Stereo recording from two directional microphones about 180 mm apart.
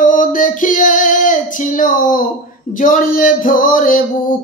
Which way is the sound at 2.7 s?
50° left (ahead or behind).